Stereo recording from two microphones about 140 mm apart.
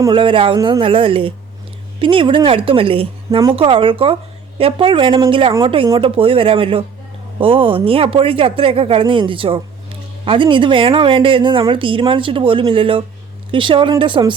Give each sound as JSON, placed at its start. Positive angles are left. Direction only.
{"t": 0.1, "sound": "speech", "side_deg": -35}